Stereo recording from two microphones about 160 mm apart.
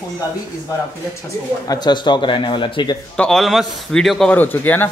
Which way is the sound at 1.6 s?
25° left (ahead or behind).